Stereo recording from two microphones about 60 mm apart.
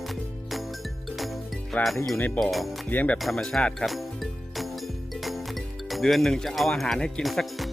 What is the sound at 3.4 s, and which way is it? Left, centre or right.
Speech, centre.